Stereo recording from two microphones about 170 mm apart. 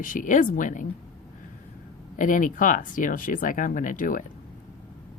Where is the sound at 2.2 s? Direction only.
50° left (ahead or behind).